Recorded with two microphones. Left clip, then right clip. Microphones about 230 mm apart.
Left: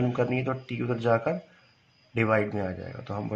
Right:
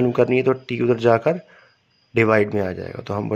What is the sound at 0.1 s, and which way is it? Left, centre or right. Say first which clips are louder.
Speech: right 10 dB; right.